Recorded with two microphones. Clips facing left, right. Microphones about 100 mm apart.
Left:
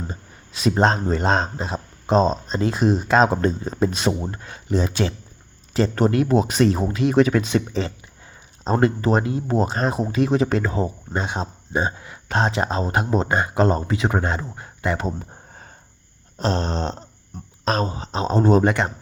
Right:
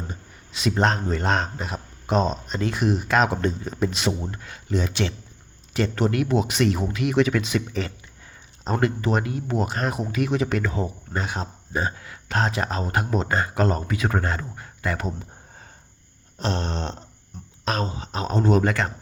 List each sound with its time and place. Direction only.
0.1 s speech: 35° left (ahead or behind)
16.4 s speech: 35° left (ahead or behind)
17.3 s a sound: 55° left (ahead or behind)
17.7 s speech: 35° left (ahead or behind)
18.6 s speech: 20° left (ahead or behind)